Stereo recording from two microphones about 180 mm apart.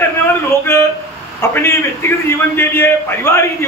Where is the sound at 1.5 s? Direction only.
15° left (ahead or behind).